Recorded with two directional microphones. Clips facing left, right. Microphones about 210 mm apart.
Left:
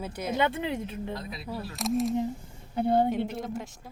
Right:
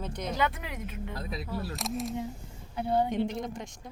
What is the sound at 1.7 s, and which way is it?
Speech, centre (ahead or behind).